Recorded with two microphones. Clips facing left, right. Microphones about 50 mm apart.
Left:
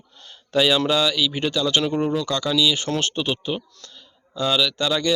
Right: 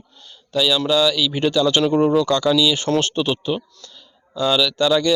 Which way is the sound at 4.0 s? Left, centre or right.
Centre.